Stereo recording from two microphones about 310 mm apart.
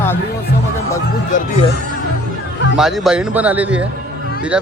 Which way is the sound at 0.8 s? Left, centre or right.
Centre.